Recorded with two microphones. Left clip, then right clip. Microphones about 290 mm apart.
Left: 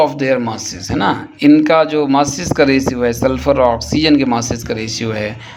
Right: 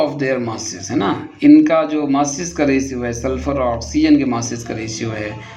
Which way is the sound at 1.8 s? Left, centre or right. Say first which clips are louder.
Left 4 dB; left.